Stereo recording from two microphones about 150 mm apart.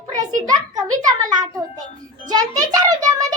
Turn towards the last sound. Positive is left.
turn(degrees=-25)  # may be behind; listen again after turning